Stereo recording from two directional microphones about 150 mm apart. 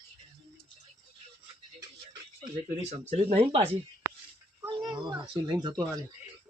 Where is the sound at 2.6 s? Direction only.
50° right (ahead or behind).